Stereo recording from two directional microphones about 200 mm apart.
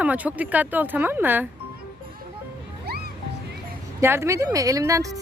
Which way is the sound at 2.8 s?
50° right (ahead or behind).